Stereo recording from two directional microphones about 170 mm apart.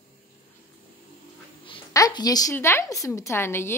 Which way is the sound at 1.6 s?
25° left (ahead or behind).